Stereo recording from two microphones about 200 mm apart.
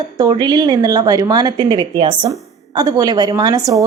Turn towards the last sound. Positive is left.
turn(degrees=-15)  # may be behind; listen again after turning